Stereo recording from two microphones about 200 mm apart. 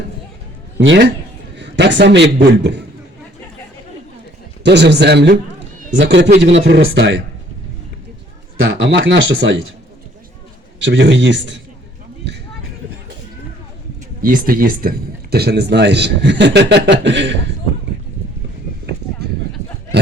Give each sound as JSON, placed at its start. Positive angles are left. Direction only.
{"t": 0.8, "sound": "a man's voice", "side_deg": -60}
{"t": 4.6, "sound": "speech", "side_deg": -60}
{"t": 8.6, "sound": "speech", "side_deg": -50}
{"t": 10.8, "sound": "speech", "side_deg": -60}
{"t": 14.2, "sound": "speech", "side_deg": -45}